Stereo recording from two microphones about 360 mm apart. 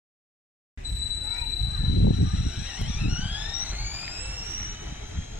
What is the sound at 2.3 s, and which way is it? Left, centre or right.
Vehicle, centre.